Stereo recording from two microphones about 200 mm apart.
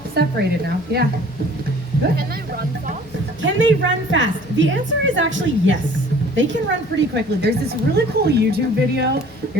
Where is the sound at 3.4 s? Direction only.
70° right (ahead or behind).